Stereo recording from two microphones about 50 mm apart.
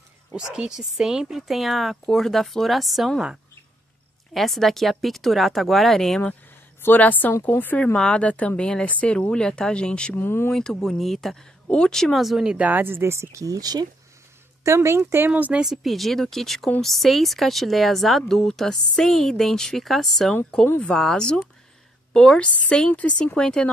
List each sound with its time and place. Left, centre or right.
0.4 s speech: centre
4.3 s speech: centre
7.0 s speech: left
7.8 s a woman's voice: centre
10.1 s speech: left
10.5 s speech: centre
12.1 s speech: centre
12.5 s speech: right
12.8 s speech: right
14.6 s speech: right
15.3 s speech: right
15.6 s speech: centre
22.1 s a woman's voice: centre